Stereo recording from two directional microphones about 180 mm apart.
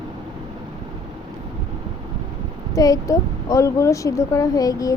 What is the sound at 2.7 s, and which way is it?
Speech, 20° left (ahead or behind).